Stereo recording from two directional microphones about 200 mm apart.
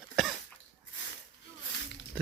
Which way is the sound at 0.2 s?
Centre (ahead or behind).